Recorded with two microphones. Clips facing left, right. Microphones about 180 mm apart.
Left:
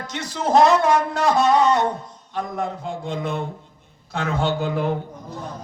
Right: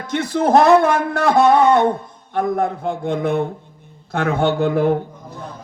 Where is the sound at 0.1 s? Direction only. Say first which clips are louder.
Right 5 dB; 55° right (ahead or behind).